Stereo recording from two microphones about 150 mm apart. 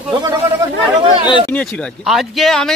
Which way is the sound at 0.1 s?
25° right (ahead or behind).